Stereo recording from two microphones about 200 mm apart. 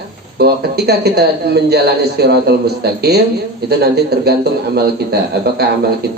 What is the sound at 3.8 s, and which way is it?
A man's voice, 55° right (ahead or behind).